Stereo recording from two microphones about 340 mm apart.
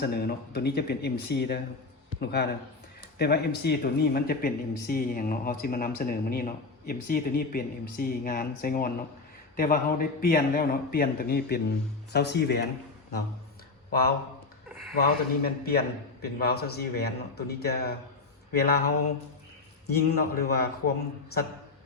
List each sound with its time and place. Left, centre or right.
0.0 s speech: left
14.9 s speech: left
19.9 s speech: left